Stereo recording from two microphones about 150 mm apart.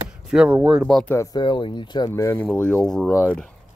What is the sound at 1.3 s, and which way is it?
Speech, 30° left (ahead or behind).